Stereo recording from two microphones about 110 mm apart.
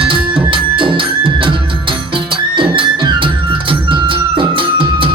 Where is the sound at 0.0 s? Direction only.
50° right (ahead or behind).